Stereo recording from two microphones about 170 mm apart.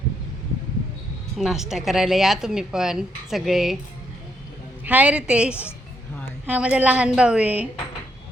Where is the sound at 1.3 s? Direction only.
Centre (ahead or behind).